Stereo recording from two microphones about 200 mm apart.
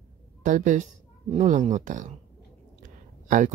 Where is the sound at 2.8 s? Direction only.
40° right (ahead or behind).